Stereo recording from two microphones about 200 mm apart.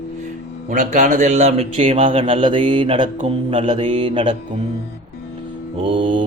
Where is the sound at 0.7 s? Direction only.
40° right (ahead or behind).